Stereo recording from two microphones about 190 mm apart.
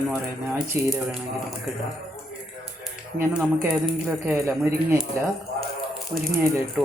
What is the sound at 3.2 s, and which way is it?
Speech, 5° right (ahead or behind).